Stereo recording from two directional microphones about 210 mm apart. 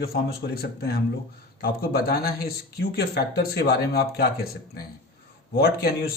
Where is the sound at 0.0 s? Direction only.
50° left (ahead or behind).